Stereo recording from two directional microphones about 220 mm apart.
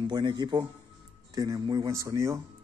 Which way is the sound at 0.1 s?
20° right (ahead or behind).